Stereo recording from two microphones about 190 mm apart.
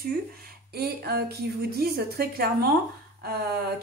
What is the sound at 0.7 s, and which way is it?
A woman's voice, 55° right (ahead or behind).